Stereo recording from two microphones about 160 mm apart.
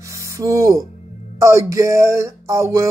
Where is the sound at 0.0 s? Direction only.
20° right (ahead or behind).